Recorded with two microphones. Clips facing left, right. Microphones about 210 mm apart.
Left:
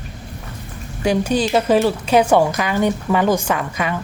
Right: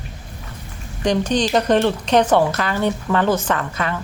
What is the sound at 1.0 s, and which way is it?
A woman's voice, 10° left (ahead or behind).